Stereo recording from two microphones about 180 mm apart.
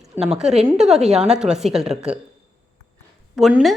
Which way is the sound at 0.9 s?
35° right (ahead or behind).